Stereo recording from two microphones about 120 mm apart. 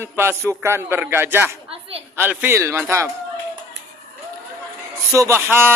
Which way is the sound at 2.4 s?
20° right (ahead or behind).